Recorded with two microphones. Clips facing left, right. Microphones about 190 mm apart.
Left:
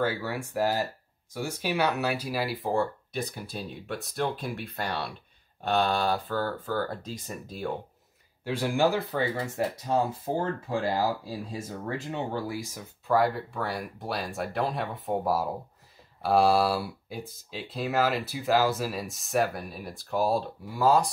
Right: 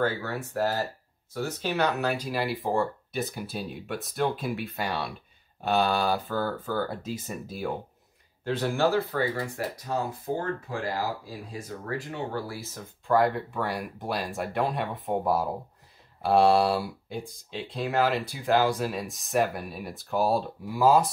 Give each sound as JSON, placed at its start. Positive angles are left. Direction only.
{"t": 0.0, "sound": "speech", "side_deg": 10}
{"t": 8.5, "sound": "speech", "side_deg": 10}
{"t": 13.2, "sound": "speech", "side_deg": 0}